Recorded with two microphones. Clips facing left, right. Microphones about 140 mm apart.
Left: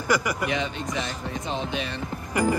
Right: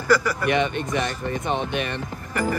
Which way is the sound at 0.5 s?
60° right (ahead or behind).